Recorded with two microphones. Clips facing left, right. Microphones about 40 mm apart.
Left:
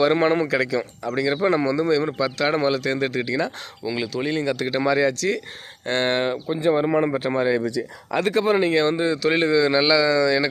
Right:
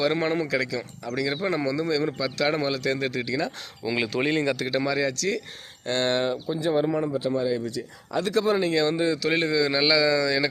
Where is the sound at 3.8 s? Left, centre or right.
Centre.